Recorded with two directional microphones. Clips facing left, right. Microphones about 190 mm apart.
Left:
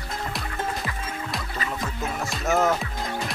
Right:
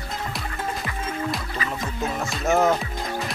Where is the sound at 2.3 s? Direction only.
Centre (ahead or behind).